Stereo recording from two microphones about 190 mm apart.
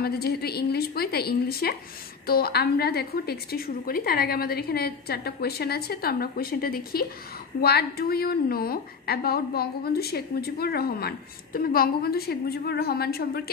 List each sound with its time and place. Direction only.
0.0 s a woman's voice: 55° left (ahead or behind)